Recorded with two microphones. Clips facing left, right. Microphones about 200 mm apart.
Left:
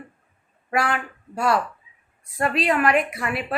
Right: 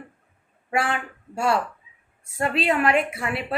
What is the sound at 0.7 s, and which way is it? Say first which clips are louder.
A woman's voice: left 1 dB; 25° right (ahead or behind).